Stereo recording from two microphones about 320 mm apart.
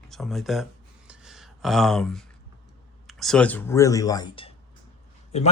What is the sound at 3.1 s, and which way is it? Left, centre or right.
Speech, centre.